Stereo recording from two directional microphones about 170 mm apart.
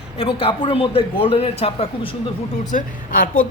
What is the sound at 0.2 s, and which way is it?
A man's voice, 30° left (ahead or behind).